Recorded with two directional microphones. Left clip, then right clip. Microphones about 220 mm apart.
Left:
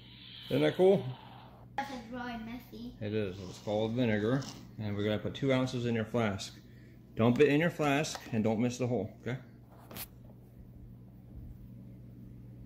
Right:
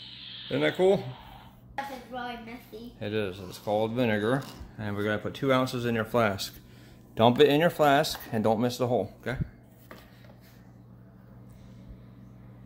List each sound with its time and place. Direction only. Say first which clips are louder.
0.5 s speech: right 2 dB; centre (ahead or behind)
2.1 s speech: right 7 dB; 40° left (ahead or behind)
3.0 s speech: right 5 dB; 5° right (ahead or behind)
7.4 s speech: right 7 dB; 10° right (ahead or behind)